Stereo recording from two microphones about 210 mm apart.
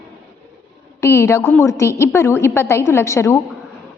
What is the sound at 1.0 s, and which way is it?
A woman's voice, 15° left (ahead or behind).